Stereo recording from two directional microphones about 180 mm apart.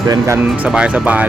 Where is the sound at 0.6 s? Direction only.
5° right (ahead or behind).